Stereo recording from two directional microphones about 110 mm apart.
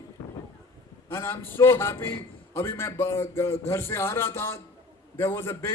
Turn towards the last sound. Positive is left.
turn(degrees=25)  # may be behind; listen again after turning